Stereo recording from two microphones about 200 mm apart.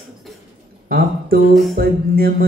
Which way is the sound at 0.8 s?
50° right (ahead or behind).